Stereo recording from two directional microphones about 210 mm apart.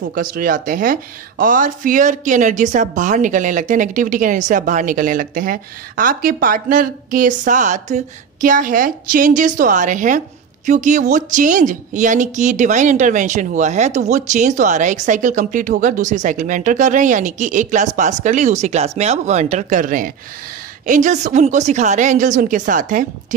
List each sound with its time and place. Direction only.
0.1 s a woman's voice: 40° right (ahead or behind)